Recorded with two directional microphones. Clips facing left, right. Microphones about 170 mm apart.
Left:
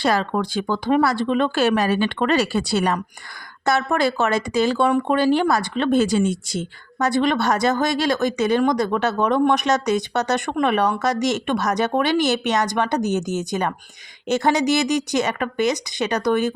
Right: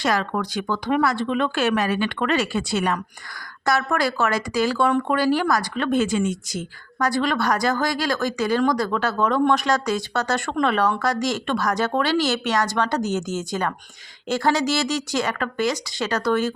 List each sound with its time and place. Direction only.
0.0 s speech: 30° left (ahead or behind)
3.7 s speech: 25° left (ahead or behind)